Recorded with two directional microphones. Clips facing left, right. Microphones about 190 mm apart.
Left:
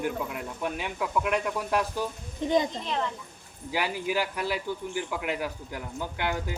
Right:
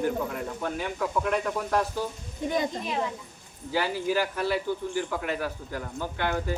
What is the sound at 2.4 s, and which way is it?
Speech, 20° left (ahead or behind).